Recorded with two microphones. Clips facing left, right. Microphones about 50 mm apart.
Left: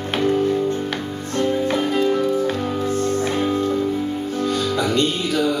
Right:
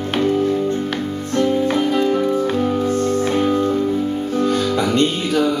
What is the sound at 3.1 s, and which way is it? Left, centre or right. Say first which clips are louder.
Music: right 3 dB; centre.